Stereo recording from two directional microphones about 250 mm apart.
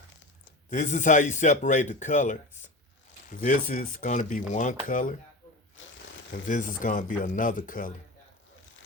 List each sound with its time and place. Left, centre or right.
0.7 s speech: left
5.8 s shuffling cards: left
6.5 s speech: left